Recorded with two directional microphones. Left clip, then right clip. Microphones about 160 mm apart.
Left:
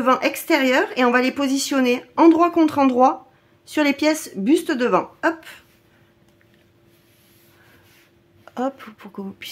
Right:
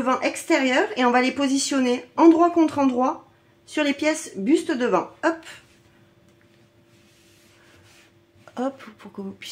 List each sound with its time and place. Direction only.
0.0 s speech: 40° left (ahead or behind); by 5.6 s 20° left (ahead or behind)
8.5 s speech: 20° left (ahead or behind)